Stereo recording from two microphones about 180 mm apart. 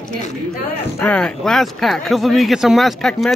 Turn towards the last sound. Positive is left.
turn(degrees=0)  # may be behind; listen again after turning